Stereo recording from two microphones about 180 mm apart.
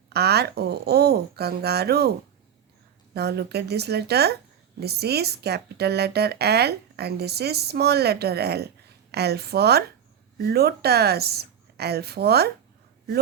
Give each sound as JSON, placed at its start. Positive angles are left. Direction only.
{"t": 0.1, "sound": "speech", "side_deg": -65}
{"t": 3.2, "sound": "speech", "side_deg": -65}